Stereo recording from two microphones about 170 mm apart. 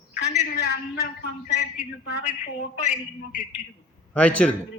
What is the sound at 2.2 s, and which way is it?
Speech, 45° left (ahead or behind).